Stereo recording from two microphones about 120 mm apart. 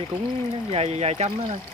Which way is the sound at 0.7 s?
60° right (ahead or behind).